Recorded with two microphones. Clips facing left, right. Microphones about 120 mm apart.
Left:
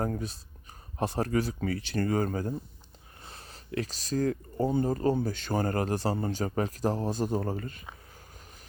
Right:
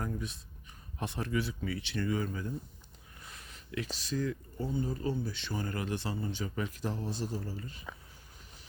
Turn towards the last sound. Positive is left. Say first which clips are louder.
# left 9 dB
turn(degrees=55)  # may be behind; listen again after turning